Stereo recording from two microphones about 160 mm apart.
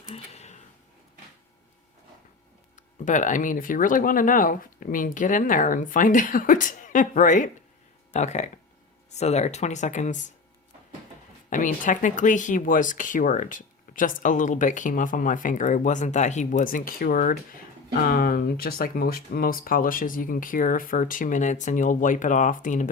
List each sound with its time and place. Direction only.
0.1 s a sound: 40° left (ahead or behind)
2.7 s speech: 50° left (ahead or behind)
11.4 s speech: 55° left (ahead or behind)